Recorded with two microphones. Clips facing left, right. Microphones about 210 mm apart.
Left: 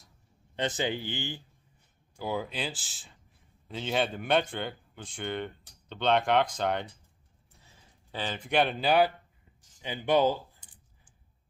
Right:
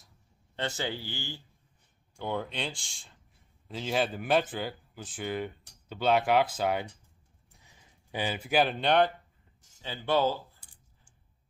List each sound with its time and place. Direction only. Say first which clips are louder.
0.6 s speech: left 3 dB; 20° left (ahead or behind)
2.1 s speech: left 1 dB; 5° left (ahead or behind)
9.8 s speech: left 2 dB; 15° left (ahead or behind)
10.6 s a sound: left 2 dB; 10° right (ahead or behind)